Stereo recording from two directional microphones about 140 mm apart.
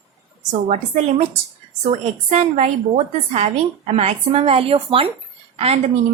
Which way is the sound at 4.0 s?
50° right (ahead or behind).